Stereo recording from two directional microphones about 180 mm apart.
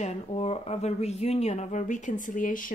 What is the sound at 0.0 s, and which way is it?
Speech, 35° left (ahead or behind).